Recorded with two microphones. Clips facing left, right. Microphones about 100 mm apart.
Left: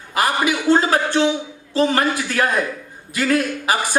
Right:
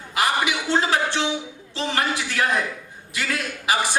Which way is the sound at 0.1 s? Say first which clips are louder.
Left 3 dB; 45° left (ahead or behind).